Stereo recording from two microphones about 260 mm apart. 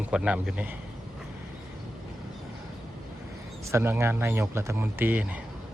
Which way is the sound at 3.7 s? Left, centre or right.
Centre.